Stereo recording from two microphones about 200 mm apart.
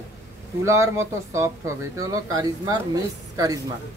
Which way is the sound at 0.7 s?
15° right (ahead or behind).